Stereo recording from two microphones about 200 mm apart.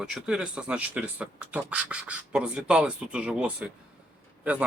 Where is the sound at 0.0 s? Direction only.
5° right (ahead or behind).